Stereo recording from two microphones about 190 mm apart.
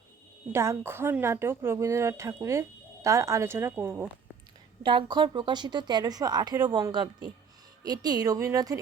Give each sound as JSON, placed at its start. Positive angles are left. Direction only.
{"t": 0.5, "sound": "speech", "side_deg": -15}
{"t": 4.8, "sound": "a woman's voice", "side_deg": -25}